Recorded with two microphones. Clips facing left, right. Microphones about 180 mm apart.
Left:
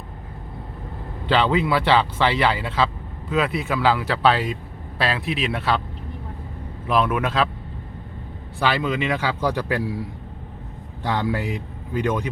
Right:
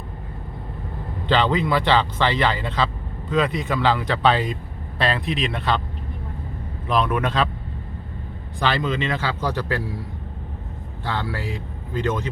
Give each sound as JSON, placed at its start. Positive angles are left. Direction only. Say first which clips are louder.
{"t": 1.3, "sound": "speech", "louder": "even", "side_deg": 10}
{"t": 6.8, "sound": "speech", "louder": "left 1 dB", "side_deg": 5}
{"t": 8.5, "sound": "speech", "louder": "left 1 dB", "side_deg": 10}
{"t": 11.0, "sound": "speech", "louder": "left 4 dB", "side_deg": 15}